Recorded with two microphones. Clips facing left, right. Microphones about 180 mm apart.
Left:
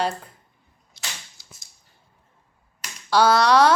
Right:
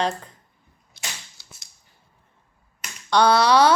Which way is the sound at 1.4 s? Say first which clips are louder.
Even; 70° right (ahead or behind).